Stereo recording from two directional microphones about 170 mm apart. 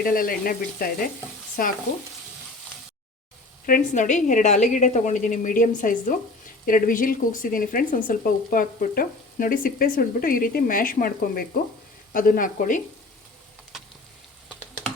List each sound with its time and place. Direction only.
0.0 s speech: 60° left (ahead or behind)
3.7 s a woman's voice: 50° left (ahead or behind)
13.7 s a sound: 5° right (ahead or behind)